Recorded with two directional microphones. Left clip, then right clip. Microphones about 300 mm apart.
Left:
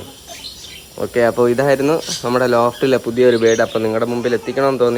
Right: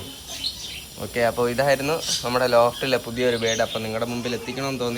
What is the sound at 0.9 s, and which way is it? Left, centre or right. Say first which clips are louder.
Speech: left 8 dB; left.